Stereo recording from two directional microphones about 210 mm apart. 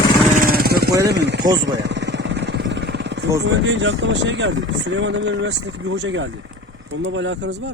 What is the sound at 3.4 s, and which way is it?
Speech, 60° right (ahead or behind).